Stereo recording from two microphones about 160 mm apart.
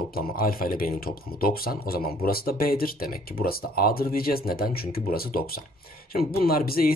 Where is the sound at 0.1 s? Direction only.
65° left (ahead or behind).